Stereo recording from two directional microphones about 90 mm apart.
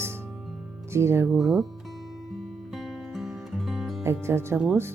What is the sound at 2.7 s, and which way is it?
Music, centre (ahead or behind).